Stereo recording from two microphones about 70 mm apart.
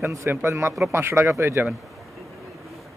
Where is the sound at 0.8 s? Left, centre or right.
Right.